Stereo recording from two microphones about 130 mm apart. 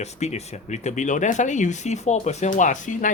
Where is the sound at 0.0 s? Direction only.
60° left (ahead or behind).